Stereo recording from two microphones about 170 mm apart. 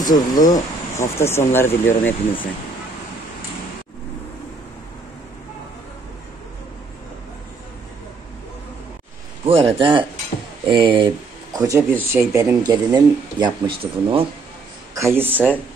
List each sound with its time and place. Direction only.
0.0 s speech: 20° left (ahead or behind)
9.5 s speech: 30° right (ahead or behind)
15.0 s speech: 15° right (ahead or behind)